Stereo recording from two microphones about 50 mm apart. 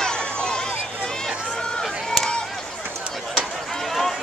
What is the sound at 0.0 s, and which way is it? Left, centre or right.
Run, centre.